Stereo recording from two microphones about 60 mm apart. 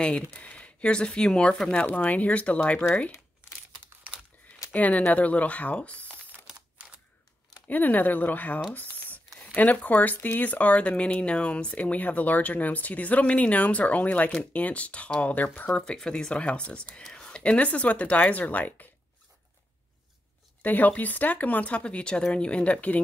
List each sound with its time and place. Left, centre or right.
0.0 s speech: centre
4.7 s speech: left
7.6 s speech: left
8.7 s a sound: left
9.4 s speech: left
20.6 s speech: left